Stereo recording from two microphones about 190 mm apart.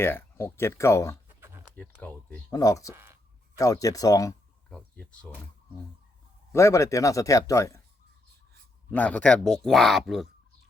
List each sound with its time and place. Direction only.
0.0 s speech: 10° left (ahead or behind)
1.4 s a sound: 10° right (ahead or behind)
1.7 s speech: 10° left (ahead or behind)
2.9 s speech: 10° right (ahead or behind)
3.6 s speech: 20° left (ahead or behind)
4.7 s speech: 5° left (ahead or behind)
6.5 s speech: 15° left (ahead or behind)
8.9 s speech: 10° left (ahead or behind)